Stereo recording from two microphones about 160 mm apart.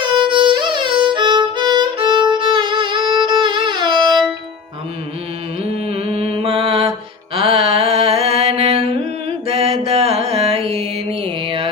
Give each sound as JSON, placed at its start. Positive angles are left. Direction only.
{"t": 0.0, "sound": "music", "side_deg": -30}
{"t": 5.7, "sound": "mantra", "side_deg": -35}
{"t": 11.2, "sound": "music", "side_deg": -35}